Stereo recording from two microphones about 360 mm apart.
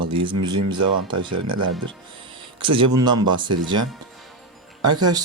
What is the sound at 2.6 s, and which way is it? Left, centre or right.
Speech, centre.